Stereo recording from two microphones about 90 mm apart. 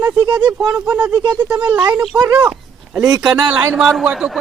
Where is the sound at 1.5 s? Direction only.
15° right (ahead or behind).